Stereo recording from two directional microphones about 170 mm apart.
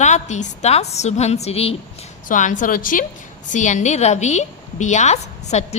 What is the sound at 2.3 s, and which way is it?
A woman's voice, 50° left (ahead or behind).